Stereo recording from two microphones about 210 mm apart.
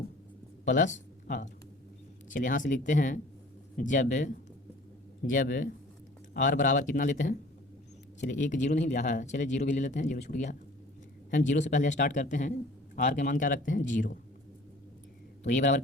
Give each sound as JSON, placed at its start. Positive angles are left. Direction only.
{"t": 0.6, "sound": "speech", "side_deg": 35}
{"t": 2.3, "sound": "speech", "side_deg": 40}
{"t": 15.4, "sound": "speech", "side_deg": 35}